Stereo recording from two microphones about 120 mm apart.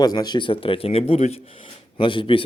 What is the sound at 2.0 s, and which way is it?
Speech, 45° left (ahead or behind).